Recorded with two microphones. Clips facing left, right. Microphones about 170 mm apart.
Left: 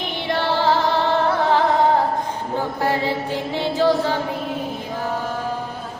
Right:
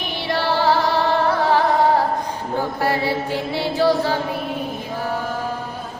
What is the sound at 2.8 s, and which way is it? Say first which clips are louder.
Mantra: even; 10° right (ahead or behind).